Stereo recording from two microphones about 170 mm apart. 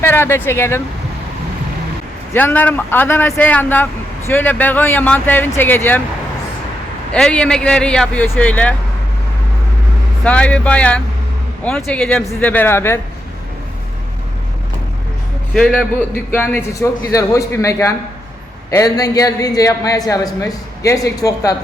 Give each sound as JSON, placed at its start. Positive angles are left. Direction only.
{"t": 0.0, "sound": "speech", "side_deg": 15}
{"t": 2.3, "sound": "speech", "side_deg": 10}
{"t": 7.1, "sound": "a man's voice", "side_deg": 5}
{"t": 10.2, "sound": "speech", "side_deg": 5}
{"t": 15.5, "sound": "a man's voice", "side_deg": 0}
{"t": 16.3, "sound": "a man's voice", "side_deg": 10}